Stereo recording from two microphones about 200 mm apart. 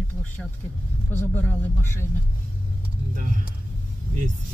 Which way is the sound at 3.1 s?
40° right (ahead or behind).